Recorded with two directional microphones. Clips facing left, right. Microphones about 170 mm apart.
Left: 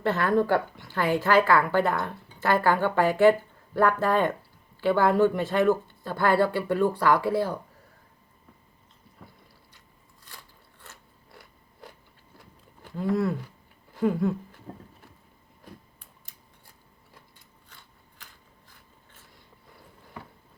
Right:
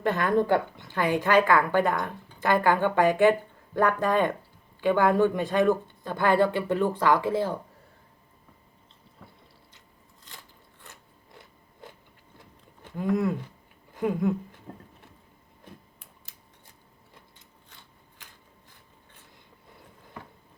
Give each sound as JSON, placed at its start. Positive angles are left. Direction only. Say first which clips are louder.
{"t": 0.0, "sound": "a woman's voice", "louder": "even", "side_deg": -15}
{"t": 10.2, "sound": "biting", "louder": "even", "side_deg": -20}
{"t": 12.8, "sound": "speech", "louder": "even", "side_deg": -20}